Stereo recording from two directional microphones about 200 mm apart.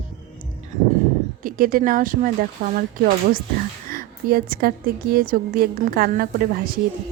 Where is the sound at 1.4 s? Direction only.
45° right (ahead or behind).